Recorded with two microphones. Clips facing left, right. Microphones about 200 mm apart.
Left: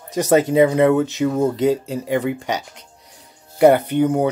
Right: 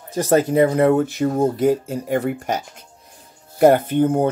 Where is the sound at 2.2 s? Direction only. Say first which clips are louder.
Even; 85° left.